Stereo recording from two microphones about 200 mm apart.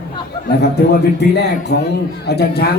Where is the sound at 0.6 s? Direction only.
55° left (ahead or behind).